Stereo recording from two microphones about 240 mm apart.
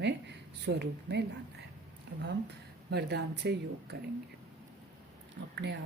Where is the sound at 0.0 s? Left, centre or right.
Right.